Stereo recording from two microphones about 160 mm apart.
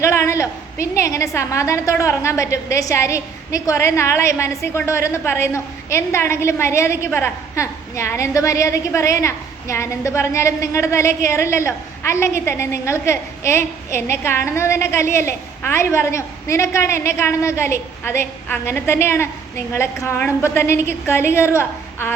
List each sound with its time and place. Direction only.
0.0 s a woman's voice: 15° left (ahead or behind)